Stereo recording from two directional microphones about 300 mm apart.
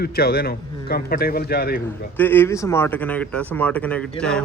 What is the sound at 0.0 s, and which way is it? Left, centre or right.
A man's voice, left.